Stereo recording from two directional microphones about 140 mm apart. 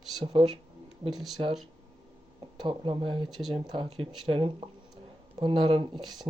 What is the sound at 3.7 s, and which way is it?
Speech, 40° right (ahead or behind).